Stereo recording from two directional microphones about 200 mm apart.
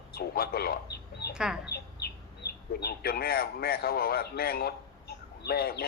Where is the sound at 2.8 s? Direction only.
50° left (ahead or behind).